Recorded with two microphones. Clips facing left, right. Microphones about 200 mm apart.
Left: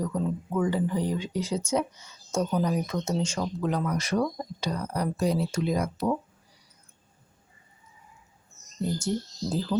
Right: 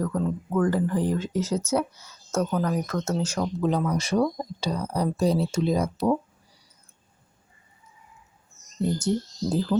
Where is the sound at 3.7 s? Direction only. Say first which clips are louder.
Right 3 dB; 25° right (ahead or behind).